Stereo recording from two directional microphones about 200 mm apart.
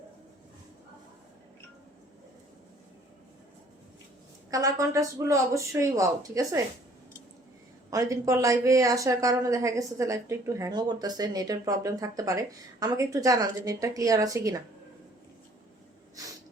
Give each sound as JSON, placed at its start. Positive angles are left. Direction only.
{"t": 4.5, "sound": "speech", "side_deg": -15}
{"t": 7.9, "sound": "speech", "side_deg": -15}
{"t": 16.2, "sound": "snort", "side_deg": -15}